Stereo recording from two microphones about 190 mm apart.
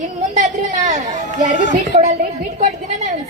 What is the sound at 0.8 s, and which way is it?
Chatter, 40° right (ahead or behind).